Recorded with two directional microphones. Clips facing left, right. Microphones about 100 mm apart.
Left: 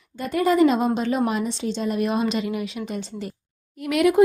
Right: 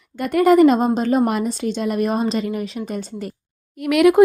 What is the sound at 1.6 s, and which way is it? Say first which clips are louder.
Speech: right 3 dB; 65° right (ahead or behind).